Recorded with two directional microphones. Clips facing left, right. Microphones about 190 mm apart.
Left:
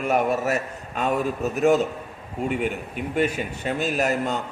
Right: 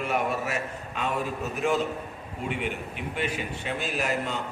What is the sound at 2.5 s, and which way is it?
A man's voice, 45° left (ahead or behind).